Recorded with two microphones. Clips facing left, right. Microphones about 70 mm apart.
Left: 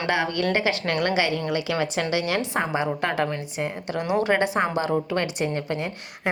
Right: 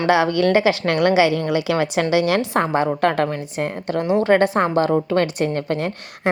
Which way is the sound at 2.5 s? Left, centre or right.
Right.